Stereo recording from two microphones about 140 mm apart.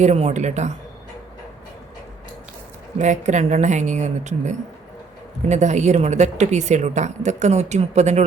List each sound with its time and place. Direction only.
0.0 s a woman's voice: 50° right (ahead or behind)
3.0 s a woman's voice: 60° right (ahead or behind)